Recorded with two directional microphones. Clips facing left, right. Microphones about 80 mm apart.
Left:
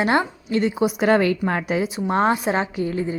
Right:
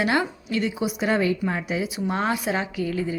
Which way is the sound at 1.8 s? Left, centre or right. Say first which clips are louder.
Left 7 dB; left.